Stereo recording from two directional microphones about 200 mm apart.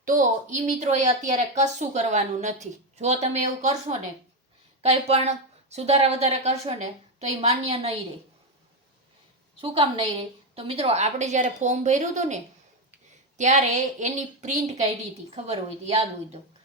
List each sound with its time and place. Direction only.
0.0 s a woman's voice: 40° right (ahead or behind)
9.6 s a woman's voice: 25° right (ahead or behind)